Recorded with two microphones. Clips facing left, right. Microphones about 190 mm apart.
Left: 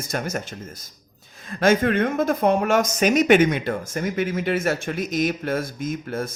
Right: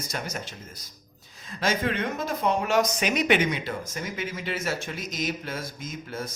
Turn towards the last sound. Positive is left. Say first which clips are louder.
# left 8 dB
turn(degrees=55)  # may be behind; listen again after turning